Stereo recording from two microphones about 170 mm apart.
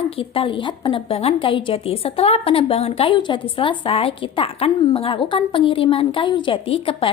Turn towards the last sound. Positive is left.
turn(degrees=35)  # may be behind; listen again after turning